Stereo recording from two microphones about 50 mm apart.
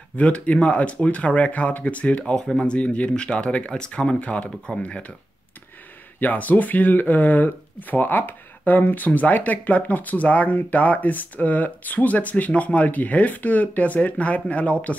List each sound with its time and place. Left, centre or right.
0.2 s speech: left
2.3 s speech: centre
2.6 s speech: left
6.1 s speech: left